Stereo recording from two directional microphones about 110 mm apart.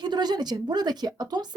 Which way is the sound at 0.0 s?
40° right (ahead or behind).